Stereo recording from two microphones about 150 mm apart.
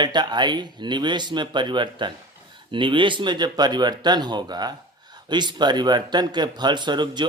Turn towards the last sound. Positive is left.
turn(degrees=-30)  # may be behind; listen again after turning